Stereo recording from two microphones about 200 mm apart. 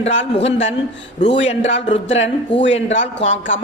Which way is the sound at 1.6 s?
65° left (ahead or behind).